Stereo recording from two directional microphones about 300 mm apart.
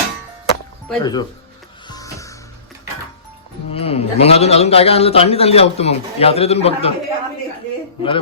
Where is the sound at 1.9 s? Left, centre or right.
Centre.